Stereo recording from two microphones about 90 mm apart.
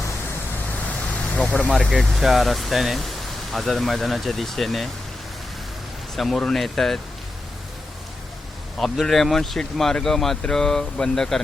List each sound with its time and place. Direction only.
0.9 s vehicle: 15° left (ahead or behind)
1.7 s speech: 5° left (ahead or behind)
6.1 s speech: centre (ahead or behind)
8.8 s speech: 5° left (ahead or behind)